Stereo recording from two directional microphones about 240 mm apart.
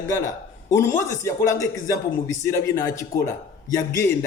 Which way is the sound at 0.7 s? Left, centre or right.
Centre.